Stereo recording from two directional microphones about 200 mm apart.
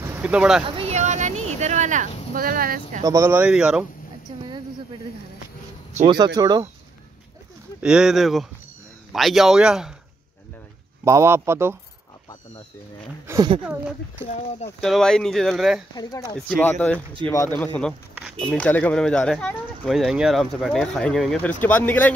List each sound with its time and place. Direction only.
0.0 s speech: 10° right (ahead or behind)
0.7 s a sound: 30° right (ahead or behind)
2.3 s speech: 45° right (ahead or behind)
3.0 s speech: 15° right (ahead or behind)
6.0 s speech: 20° right (ahead or behind)
7.8 s speech: 5° right (ahead or behind)
11.1 s speech: 15° right (ahead or behind)
13.3 s speech: 20° right (ahead or behind)
13.7 s speech: 5° right (ahead or behind)
15.9 s speech: 20° left (ahead or behind)
16.3 s speech: 5° left (ahead or behind)